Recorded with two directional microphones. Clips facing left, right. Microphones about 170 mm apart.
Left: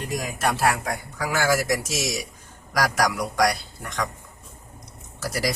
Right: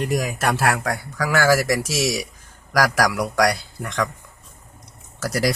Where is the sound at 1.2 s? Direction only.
70° right (ahead or behind).